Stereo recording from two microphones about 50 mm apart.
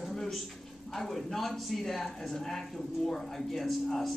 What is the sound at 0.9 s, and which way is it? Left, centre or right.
A man's voice, centre.